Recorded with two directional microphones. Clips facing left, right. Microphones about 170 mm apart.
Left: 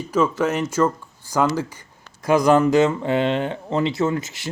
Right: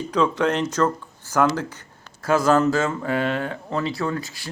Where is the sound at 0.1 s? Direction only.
5° left (ahead or behind).